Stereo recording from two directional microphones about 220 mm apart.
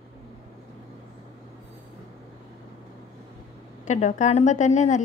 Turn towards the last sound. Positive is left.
turn(degrees=35)  # may be behind; listen again after turning